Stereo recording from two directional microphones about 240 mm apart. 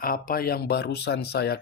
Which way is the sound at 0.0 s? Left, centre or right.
Left.